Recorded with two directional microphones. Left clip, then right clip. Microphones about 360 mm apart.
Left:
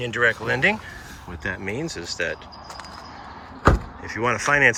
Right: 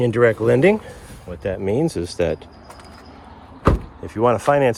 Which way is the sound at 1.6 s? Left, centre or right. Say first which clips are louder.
Right 9 dB; right.